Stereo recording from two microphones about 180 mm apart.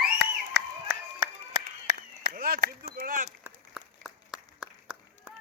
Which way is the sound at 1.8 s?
50° right (ahead or behind).